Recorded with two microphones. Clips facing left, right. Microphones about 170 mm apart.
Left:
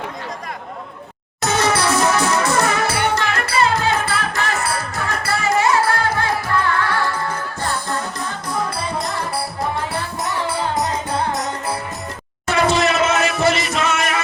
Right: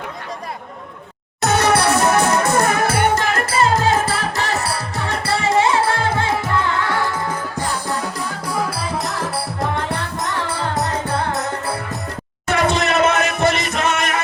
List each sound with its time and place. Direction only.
1.4 s music: 65° right (ahead or behind); by 9.8 s centre (ahead or behind)
12.5 s music: 55° right (ahead or behind)